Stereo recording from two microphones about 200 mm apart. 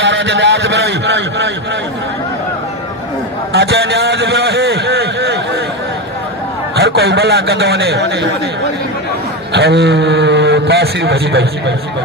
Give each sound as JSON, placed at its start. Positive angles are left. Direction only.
{"t": 0.0, "sound": "a man's voice", "side_deg": -60}
{"t": 3.5, "sound": "a man's voice", "side_deg": -55}
{"t": 6.7, "sound": "a man's voice", "side_deg": -55}
{"t": 9.5, "sound": "a man's voice", "side_deg": -55}